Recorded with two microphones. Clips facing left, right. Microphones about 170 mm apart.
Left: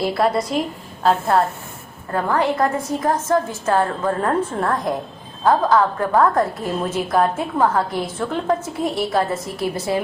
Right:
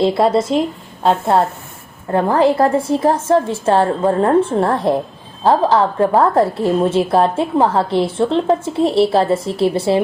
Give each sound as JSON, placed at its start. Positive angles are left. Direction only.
{"t": 0.0, "sound": "a woman's voice", "side_deg": -25}